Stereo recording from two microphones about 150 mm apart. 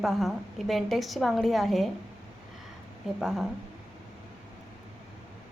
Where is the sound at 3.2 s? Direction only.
Centre (ahead or behind).